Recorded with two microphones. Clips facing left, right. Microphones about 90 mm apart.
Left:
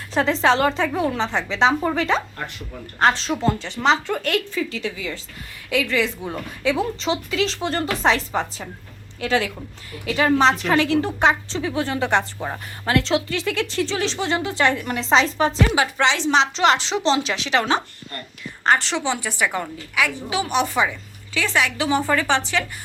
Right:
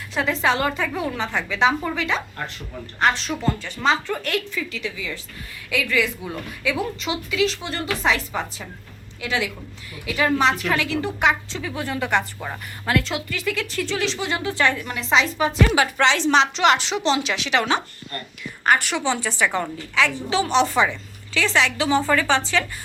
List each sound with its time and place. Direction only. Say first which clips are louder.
0.1 s a woman's voice: left 3 dB; 30° left (ahead or behind)